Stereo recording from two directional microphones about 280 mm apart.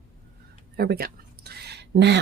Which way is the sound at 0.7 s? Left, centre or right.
Right.